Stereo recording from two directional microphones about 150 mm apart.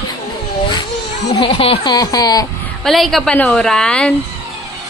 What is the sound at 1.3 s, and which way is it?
Speech, 40° left (ahead or behind).